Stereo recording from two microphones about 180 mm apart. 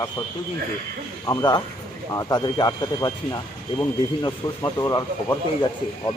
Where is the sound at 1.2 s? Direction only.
20° left (ahead or behind).